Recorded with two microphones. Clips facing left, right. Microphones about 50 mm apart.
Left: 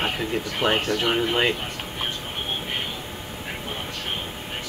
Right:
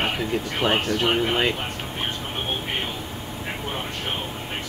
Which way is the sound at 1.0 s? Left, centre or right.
Right.